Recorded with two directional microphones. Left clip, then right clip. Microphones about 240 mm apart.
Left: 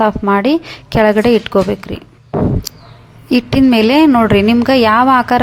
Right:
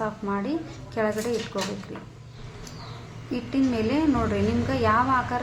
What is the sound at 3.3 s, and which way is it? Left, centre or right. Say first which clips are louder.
A woman's voice: left 15 dB; left.